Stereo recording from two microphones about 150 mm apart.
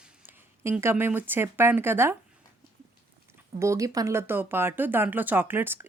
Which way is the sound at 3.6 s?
20° right (ahead or behind).